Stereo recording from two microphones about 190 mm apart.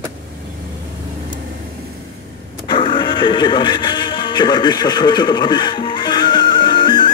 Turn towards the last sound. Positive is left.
turn(degrees=25)  # may be behind; listen again after turning